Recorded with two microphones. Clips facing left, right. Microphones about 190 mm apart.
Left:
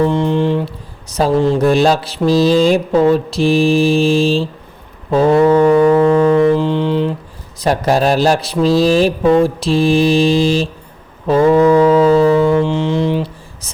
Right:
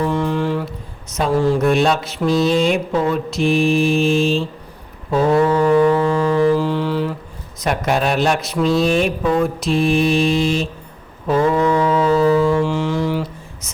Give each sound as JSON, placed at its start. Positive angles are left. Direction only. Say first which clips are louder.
{"t": 0.0, "sound": "mantra", "louder": "left 5 dB", "side_deg": 25}
{"t": 5.1, "sound": "foghorn", "louder": "left 5 dB", "side_deg": 25}
{"t": 6.0, "sound": "music", "louder": "left 6 dB", "side_deg": 25}
{"t": 7.6, "sound": "mantra", "louder": "left 5 dB", "side_deg": 35}
{"t": 11.8, "sound": "mantra", "louder": "left 7 dB", "side_deg": 35}
{"t": 12.4, "sound": "music", "louder": "left 3 dB", "side_deg": 20}